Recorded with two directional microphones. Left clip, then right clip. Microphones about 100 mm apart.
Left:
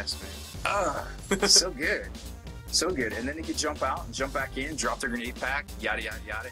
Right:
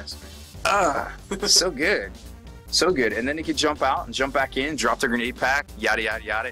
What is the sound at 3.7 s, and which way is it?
Speech, 40° right (ahead or behind).